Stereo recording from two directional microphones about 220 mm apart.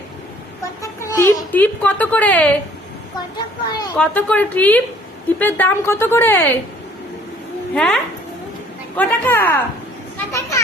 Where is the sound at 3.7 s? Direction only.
15° left (ahead or behind).